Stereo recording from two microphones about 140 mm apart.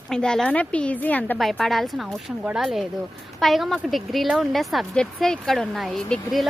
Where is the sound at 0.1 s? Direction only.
5° left (ahead or behind).